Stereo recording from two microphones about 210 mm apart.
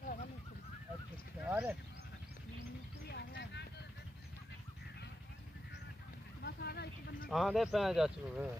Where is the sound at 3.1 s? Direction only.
50° left (ahead or behind).